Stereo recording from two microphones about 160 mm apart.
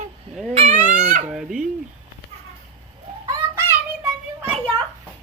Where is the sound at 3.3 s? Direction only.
15° right (ahead or behind).